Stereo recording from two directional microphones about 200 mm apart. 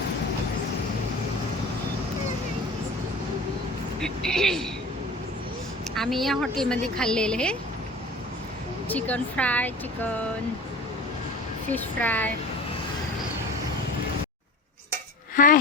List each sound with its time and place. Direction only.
4.0 s a woman's voice: centre (ahead or behind)
5.9 s a woman's voice: centre (ahead or behind)
8.9 s speech: 5° left (ahead or behind)
11.7 s speech: 10° left (ahead or behind)
15.4 s speech: 40° left (ahead or behind)